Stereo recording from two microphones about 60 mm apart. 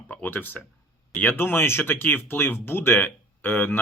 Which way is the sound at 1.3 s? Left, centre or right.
Left.